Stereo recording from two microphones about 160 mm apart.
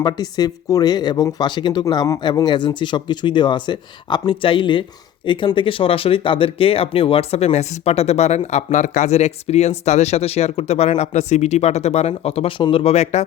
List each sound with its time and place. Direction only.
0.0 s speech: 25° left (ahead or behind); by 13.2 s 45° left (ahead or behind)